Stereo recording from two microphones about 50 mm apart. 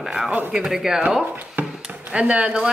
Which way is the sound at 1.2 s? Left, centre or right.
Right.